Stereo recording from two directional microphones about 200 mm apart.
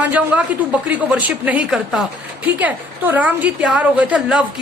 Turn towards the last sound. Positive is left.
turn(degrees=-5)  # may be behind; listen again after turning